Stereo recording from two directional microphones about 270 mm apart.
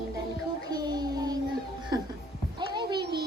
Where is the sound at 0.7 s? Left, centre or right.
Centre.